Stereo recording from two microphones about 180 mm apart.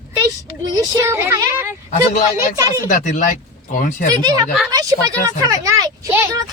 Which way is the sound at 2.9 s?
45° left (ahead or behind).